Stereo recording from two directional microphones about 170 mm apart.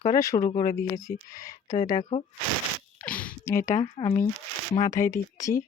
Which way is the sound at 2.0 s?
40° left (ahead or behind).